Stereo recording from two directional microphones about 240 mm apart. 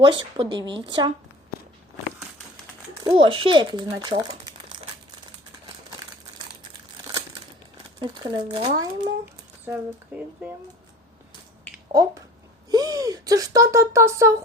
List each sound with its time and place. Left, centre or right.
0.0 s speech: centre
3.0 s speech: centre
7.9 s speech: centre
11.9 s speech: centre